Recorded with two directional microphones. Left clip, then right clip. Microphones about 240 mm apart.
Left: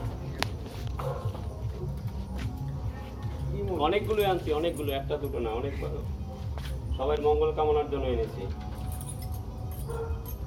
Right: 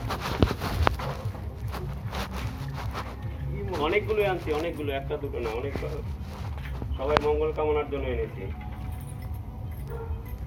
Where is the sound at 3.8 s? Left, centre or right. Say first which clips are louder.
Right 1 dB; left.